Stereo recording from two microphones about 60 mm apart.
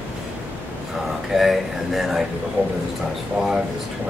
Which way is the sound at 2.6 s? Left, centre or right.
Right.